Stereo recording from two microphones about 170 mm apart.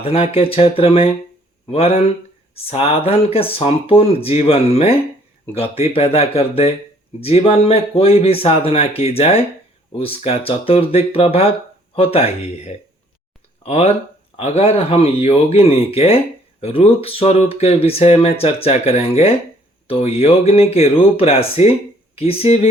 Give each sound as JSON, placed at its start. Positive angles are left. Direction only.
{"t": 0.0, "sound": "speech", "side_deg": 35}